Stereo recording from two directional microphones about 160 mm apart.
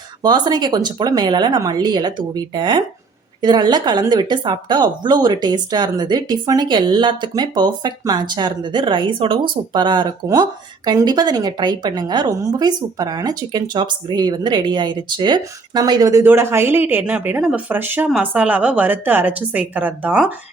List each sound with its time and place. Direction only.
0.2 s a woman's voice: 25° right (ahead or behind); by 20.3 s 5° right (ahead or behind)